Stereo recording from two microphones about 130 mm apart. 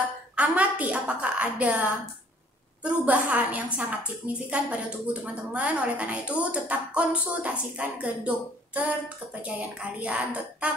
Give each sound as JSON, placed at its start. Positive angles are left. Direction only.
{"t": 0.4, "sound": "a woman's voice", "side_deg": -10}